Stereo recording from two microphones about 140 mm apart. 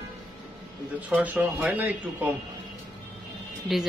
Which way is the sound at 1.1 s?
10° right (ahead or behind).